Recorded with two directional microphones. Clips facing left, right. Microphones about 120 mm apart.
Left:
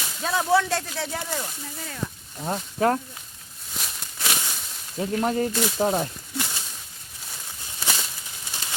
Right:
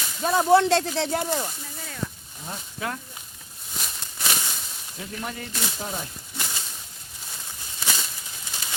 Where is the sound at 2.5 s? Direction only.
40° left (ahead or behind).